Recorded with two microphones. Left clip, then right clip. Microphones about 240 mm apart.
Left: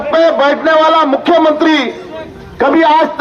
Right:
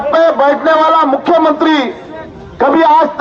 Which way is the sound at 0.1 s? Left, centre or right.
Left.